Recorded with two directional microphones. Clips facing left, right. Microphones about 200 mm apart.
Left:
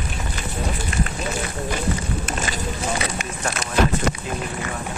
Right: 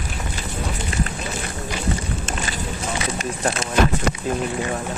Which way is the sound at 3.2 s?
30° right (ahead or behind).